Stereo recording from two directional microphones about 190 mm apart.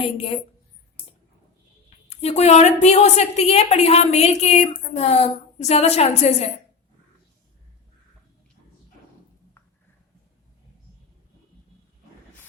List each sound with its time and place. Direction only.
0.0 s a woman's voice: 30° left (ahead or behind)
2.0 s a woman's voice: 35° left (ahead or behind)